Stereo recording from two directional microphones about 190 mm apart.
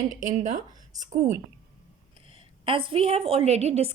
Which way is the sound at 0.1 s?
40° right (ahead or behind).